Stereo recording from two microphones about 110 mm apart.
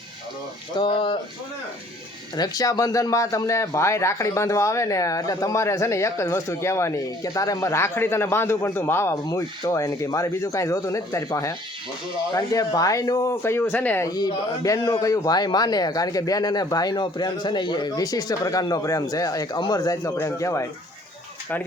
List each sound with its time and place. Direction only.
0.8 s speech: 50° left (ahead or behind)
2.3 s speech: 35° left (ahead or behind); by 14.1 s 20° left (ahead or behind)
14.1 s speech: 35° left (ahead or behind)